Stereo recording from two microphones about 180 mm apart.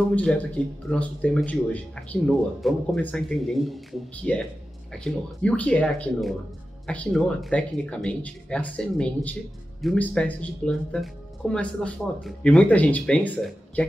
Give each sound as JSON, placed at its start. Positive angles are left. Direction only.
{"t": 0.1, "sound": "speech", "side_deg": 5}